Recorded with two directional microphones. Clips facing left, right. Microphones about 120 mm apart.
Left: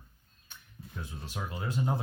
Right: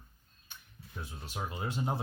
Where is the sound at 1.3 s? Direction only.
20° right (ahead or behind).